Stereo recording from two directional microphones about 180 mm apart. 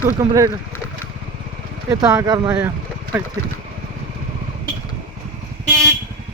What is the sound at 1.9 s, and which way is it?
Speech, 20° right (ahead or behind).